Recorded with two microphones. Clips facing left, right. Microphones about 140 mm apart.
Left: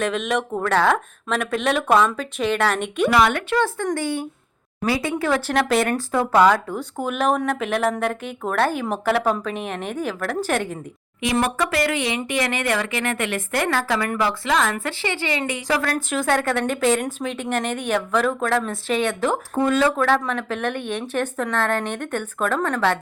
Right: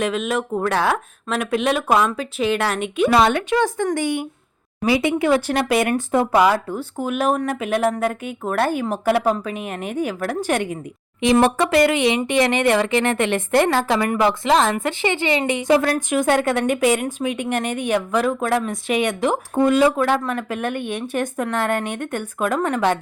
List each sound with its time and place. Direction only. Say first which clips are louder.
0.0 s a woman's voice: right 1 dB; 5° right (ahead or behind)
3.1 s a woman's voice: right 2 dB; 25° right (ahead or behind)
11.2 s a woman's voice: right 6 dB; 25° right (ahead or behind)